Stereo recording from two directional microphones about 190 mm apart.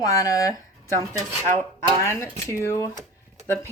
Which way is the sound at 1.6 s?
15° left (ahead or behind).